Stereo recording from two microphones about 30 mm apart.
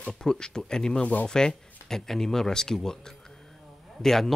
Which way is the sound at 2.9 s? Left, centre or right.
Left.